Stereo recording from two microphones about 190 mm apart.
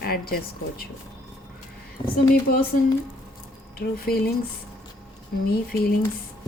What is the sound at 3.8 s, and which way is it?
Speech, 55° left (ahead or behind).